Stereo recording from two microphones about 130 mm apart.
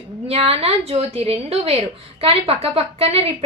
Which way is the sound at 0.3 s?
50° right (ahead or behind).